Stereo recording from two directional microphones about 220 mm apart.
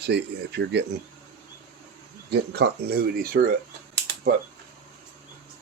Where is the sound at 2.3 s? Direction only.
50° right (ahead or behind).